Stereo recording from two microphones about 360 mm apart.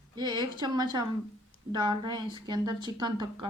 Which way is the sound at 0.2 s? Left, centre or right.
Centre.